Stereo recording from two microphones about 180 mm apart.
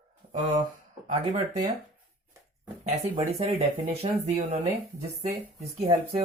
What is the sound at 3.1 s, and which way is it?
Speech, 30° right (ahead or behind).